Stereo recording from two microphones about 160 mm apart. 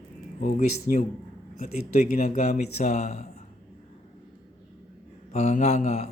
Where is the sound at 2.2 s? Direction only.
40° left (ahead or behind).